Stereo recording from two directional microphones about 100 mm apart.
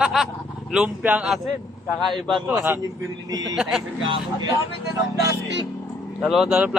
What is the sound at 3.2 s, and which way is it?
Speech, 40° right (ahead or behind).